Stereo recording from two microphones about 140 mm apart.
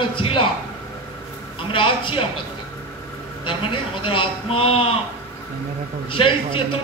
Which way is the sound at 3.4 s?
40° left (ahead or behind).